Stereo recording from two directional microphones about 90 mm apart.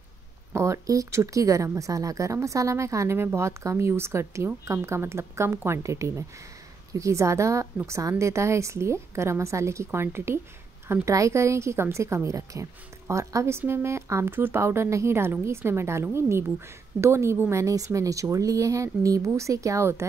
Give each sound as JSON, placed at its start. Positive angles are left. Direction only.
{"t": 0.5, "sound": "speech", "side_deg": -30}